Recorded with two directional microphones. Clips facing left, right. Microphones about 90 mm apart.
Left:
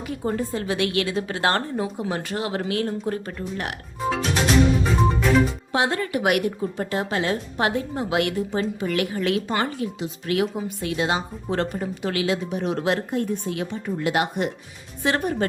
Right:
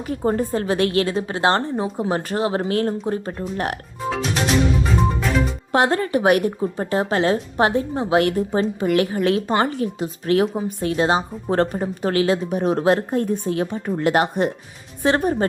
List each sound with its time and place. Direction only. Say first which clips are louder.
0.1 s a woman's voice: right 5 dB; 40° right (ahead or behind)
4.8 s music: even; centre (ahead or behind)
5.7 s speech: right 6 dB; 45° right (ahead or behind)
6.0 s a woman's voice: right 5 dB; 35° right (ahead or behind)